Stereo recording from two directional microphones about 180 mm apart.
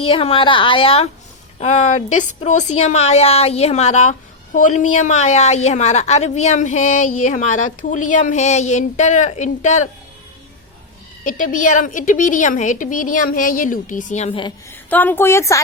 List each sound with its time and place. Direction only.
0.0 s a woman's voice: 30° left (ahead or behind)
11.2 s a woman's voice: 50° left (ahead or behind); by 14.5 s 30° left (ahead or behind)
14.7 s a woman's voice: 10° left (ahead or behind)